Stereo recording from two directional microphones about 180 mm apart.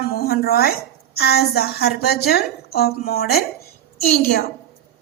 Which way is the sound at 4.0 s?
45° left (ahead or behind).